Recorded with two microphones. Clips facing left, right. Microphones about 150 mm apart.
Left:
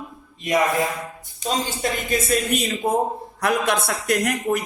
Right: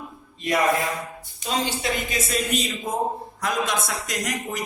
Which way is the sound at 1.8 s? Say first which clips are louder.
Left 3 dB; 55° left (ahead or behind).